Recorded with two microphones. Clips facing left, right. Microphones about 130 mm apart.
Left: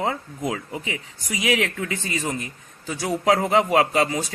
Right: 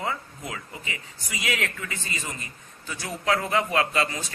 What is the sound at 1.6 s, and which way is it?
Speech, 80° left.